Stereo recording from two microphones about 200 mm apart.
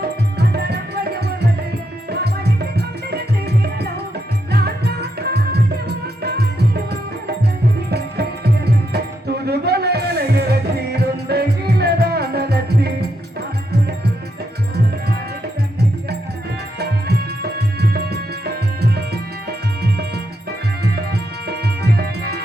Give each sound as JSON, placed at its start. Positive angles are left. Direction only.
{"t": 0.3, "sound": "tabla", "side_deg": -55}
{"t": 4.6, "sound": "music", "side_deg": -55}
{"t": 7.9, "sound": "music", "side_deg": -55}
{"t": 9.5, "sound": "music", "side_deg": -55}
{"t": 17.7, "sound": "music", "side_deg": -55}
{"t": 20.9, "sound": "music", "side_deg": -55}